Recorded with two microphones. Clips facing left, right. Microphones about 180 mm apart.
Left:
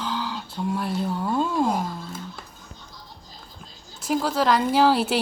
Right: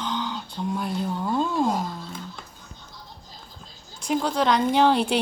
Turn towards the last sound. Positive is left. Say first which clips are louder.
# even
turn(degrees=5)  # may be behind; listen again after turning